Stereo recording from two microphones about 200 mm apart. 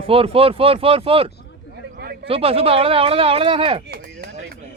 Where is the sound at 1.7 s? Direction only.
50° right (ahead or behind).